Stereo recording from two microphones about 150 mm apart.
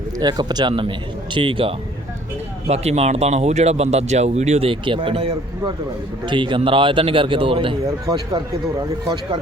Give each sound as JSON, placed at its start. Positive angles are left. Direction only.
{"t": 0.2, "sound": "a man's voice", "side_deg": -25}
{"t": 7.9, "sound": "speech", "side_deg": -25}